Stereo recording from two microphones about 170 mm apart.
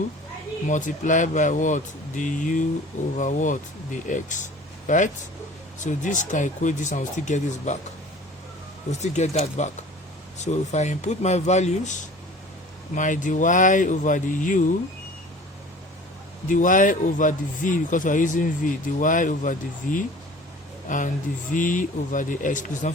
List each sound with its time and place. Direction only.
0.7 s speech: 50° left (ahead or behind)
9.0 s speech: 40° left (ahead or behind)
16.5 s speech: 50° left (ahead or behind)